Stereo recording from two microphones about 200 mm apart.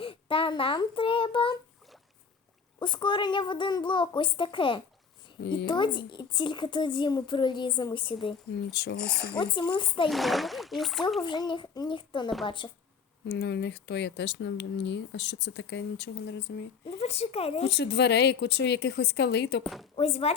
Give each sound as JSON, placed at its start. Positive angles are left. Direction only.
{"t": 0.0, "sound": "a child's voice", "side_deg": 25}
{"t": 2.7, "sound": "speech", "side_deg": 25}
{"t": 8.7, "sound": "speech", "side_deg": 55}
{"t": 9.3, "sound": "speech", "side_deg": 25}
{"t": 10.1, "sound": "speech", "side_deg": 0}
{"t": 11.2, "sound": "speech", "side_deg": 20}
{"t": 13.2, "sound": "speech", "side_deg": 60}
{"t": 16.8, "sound": "a woman's voice", "side_deg": 30}
{"t": 17.7, "sound": "speech", "side_deg": 55}
{"t": 20.0, "sound": "speech", "side_deg": 30}